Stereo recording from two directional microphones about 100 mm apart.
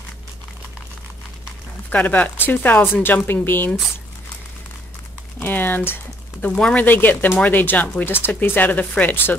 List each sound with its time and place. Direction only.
1.9 s speech: 15° left (ahead or behind)
5.4 s speech: 20° left (ahead or behind)